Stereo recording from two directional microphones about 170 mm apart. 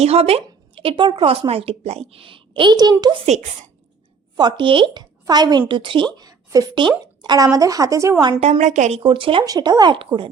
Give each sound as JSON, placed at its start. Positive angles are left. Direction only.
{"t": 0.0, "sound": "speech", "side_deg": -35}
{"t": 3.2, "sound": "speech", "side_deg": -40}
{"t": 4.4, "sound": "speech", "side_deg": -25}
{"t": 8.4, "sound": "speech", "side_deg": -40}
{"t": 9.0, "sound": "speech", "side_deg": -30}